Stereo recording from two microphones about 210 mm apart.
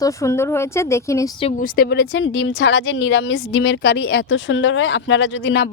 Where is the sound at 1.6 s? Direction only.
45° left (ahead or behind).